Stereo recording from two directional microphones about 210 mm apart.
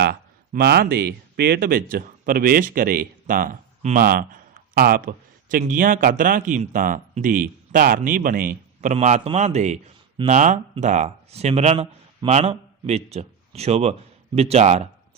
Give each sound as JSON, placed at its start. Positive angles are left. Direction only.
{"t": 0.0, "sound": "speech", "side_deg": -50}